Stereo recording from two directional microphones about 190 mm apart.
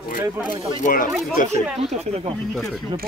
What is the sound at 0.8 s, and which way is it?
Speech, 45° left (ahead or behind).